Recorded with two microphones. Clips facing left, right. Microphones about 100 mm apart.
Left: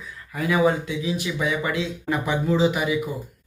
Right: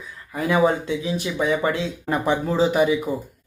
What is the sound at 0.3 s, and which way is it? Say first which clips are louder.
Speech: right 1 dB; 30° right (ahead or behind).